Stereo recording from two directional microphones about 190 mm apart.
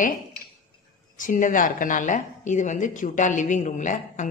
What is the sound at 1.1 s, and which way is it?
A woman's voice, 45° left (ahead or behind).